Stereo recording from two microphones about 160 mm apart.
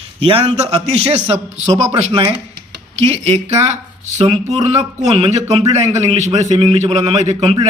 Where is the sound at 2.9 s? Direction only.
40° right (ahead or behind).